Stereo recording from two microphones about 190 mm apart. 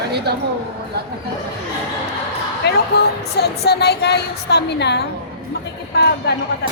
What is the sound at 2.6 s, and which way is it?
A woman's voice, 60° left (ahead or behind).